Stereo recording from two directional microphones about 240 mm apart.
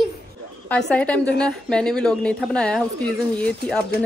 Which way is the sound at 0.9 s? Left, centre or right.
Centre.